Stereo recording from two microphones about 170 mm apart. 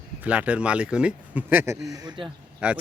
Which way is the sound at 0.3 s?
5° right (ahead or behind).